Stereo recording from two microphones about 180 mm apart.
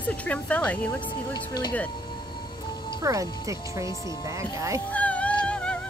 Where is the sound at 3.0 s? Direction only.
20° right (ahead or behind).